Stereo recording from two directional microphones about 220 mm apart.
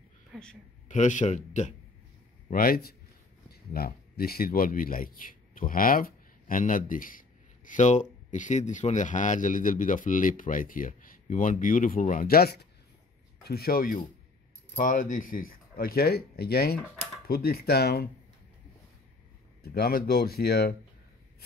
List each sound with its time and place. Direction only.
0.3 s speech: 5° left (ahead or behind)
0.8 s speech: 35° left (ahead or behind)
19.6 s speech: 45° left (ahead or behind)